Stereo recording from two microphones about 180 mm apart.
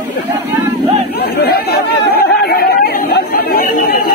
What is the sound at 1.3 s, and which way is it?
Chatter, 60° left (ahead or behind).